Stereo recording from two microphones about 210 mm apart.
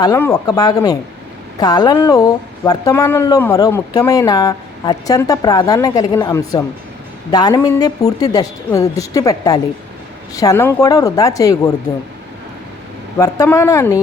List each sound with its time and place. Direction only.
0.0 s speech: 15° left (ahead or behind)
13.1 s speech: 15° left (ahead or behind)